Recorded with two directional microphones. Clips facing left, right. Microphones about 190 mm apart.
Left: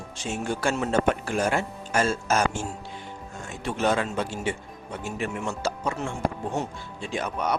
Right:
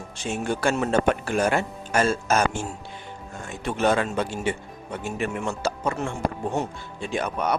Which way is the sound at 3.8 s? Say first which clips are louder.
Right 3 dB; 55° right (ahead or behind).